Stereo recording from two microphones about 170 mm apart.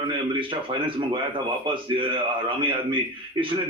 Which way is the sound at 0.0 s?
30° right (ahead or behind).